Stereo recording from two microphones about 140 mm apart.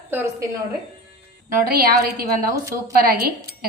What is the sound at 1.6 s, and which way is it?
A woman's voice, 90° right.